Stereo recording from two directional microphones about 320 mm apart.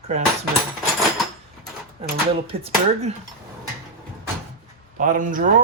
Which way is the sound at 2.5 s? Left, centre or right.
Centre.